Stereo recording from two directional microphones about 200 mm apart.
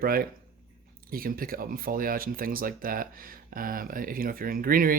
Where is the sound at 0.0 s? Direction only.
45° right (ahead or behind).